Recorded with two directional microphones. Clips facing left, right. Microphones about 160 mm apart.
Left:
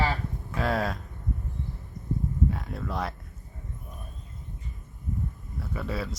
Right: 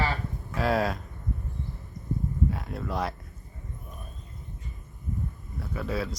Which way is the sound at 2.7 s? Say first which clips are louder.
Right 1 dB; centre (ahead or behind).